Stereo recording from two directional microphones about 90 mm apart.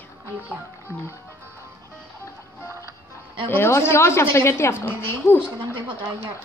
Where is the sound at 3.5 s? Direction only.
30° left (ahead or behind).